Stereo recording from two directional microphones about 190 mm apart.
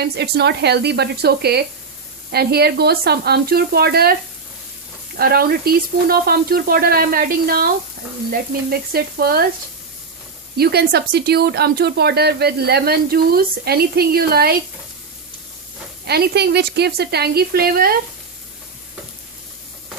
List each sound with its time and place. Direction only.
0.0 s a woman's voice: 60° right (ahead or behind)
5.1 s speech: 55° right (ahead or behind)
10.6 s a woman's voice: 55° right (ahead or behind)
16.0 s a woman's voice: 55° right (ahead or behind)